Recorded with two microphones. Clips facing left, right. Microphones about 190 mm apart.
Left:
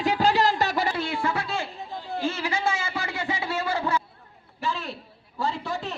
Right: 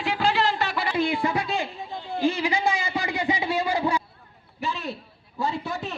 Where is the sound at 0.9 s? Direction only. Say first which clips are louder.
Right 4 dB; 15° right (ahead or behind).